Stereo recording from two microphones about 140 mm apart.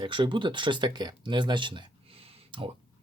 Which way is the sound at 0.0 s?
35° right (ahead or behind).